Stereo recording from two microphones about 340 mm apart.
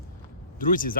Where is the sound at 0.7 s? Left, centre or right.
Left.